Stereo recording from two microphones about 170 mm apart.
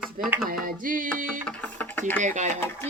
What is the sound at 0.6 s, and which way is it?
Music, 55° right (ahead or behind).